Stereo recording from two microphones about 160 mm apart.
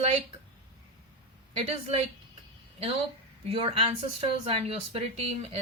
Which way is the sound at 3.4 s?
40° right (ahead or behind).